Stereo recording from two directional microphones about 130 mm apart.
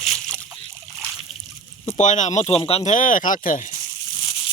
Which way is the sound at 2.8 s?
85° left.